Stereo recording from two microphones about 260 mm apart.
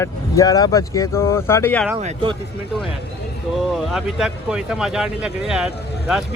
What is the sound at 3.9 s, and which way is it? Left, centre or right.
Speech, centre.